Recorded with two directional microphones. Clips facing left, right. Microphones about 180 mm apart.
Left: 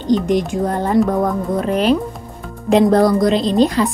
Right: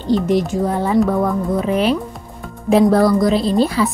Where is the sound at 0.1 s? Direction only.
5° right (ahead or behind).